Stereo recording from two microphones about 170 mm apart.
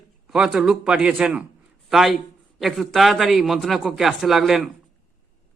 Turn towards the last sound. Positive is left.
turn(degrees=0)  # may be behind; listen again after turning